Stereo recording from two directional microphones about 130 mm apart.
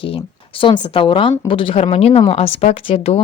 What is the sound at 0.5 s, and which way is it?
A woman's voice, 40° left (ahead or behind).